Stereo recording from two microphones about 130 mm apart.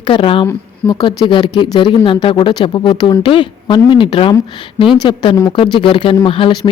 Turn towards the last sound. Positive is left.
turn(degrees=40)  # may be behind; listen again after turning